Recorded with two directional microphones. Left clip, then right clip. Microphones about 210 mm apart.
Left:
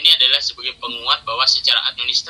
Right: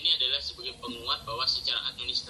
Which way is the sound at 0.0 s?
40° left (ahead or behind).